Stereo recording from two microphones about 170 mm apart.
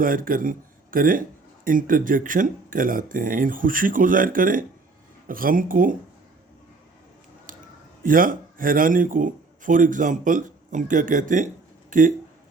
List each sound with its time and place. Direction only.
0.0 s speech: 55° right (ahead or behind)
8.0 s speech: 55° right (ahead or behind)